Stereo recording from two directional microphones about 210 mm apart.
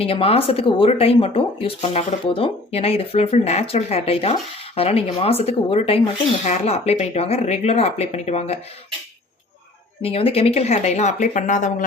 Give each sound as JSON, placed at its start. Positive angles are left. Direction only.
{"t": 0.0, "sound": "speech", "side_deg": 25}
{"t": 10.0, "sound": "speech", "side_deg": 25}